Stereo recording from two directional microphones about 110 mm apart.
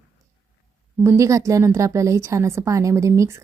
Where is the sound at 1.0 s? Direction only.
30° right (ahead or behind).